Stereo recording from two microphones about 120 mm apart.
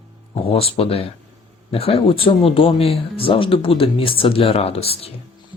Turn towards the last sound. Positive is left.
turn(degrees=55)  # may be behind; listen again after turning